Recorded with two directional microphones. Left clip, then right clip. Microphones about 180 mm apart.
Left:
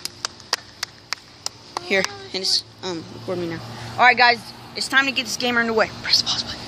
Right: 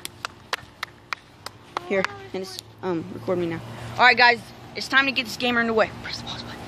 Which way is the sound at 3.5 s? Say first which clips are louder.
Left 1 dB; 15° right (ahead or behind).